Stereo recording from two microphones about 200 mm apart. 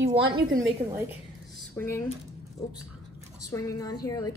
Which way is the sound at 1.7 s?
10° left (ahead or behind).